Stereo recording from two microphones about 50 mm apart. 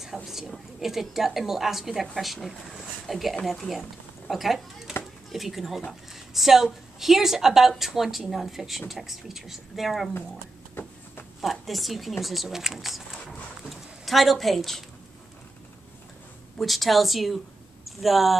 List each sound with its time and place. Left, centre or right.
0.0 s speech: centre
10.7 s a sound: left
11.4 s speech: centre
16.5 s speech: centre